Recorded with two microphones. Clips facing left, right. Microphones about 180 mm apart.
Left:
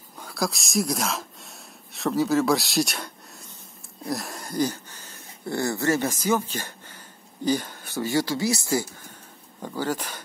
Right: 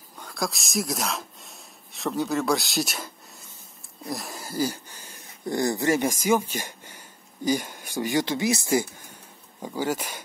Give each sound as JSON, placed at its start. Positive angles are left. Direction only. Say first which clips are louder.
{"t": 0.2, "sound": "speech", "louder": "left 2 dB", "side_deg": 0}